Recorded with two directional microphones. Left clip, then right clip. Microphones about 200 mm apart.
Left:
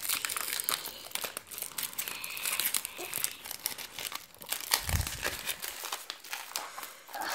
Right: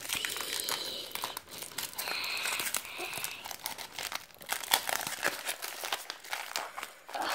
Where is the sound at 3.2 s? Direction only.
5° right (ahead or behind).